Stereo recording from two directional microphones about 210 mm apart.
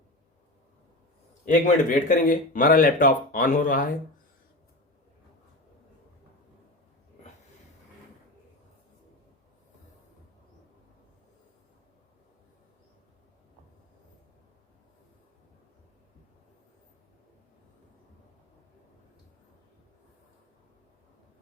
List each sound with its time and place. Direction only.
1.5 s speech: 40° left (ahead or behind)